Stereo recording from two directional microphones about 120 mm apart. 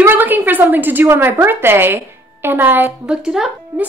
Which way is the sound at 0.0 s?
15° right (ahead or behind).